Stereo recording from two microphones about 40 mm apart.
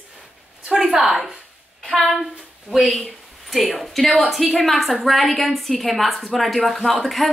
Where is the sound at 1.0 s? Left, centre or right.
Centre.